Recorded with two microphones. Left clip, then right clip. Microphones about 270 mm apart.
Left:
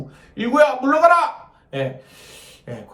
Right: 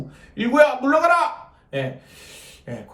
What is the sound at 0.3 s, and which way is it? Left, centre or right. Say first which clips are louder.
Speech: even; centre.